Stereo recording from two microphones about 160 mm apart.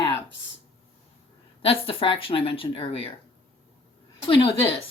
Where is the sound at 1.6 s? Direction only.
35° left (ahead or behind).